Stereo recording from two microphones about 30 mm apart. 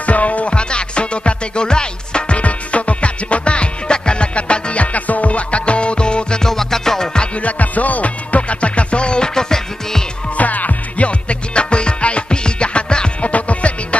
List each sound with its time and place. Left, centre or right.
0.0 s music: left
0.5 s music: left
2.3 s music: left
4.9 s music: left
6.4 s music: centre
7.3 s music: left
9.3 s music: left
10.3 s music: left
11.1 s music: left
13.2 s music: left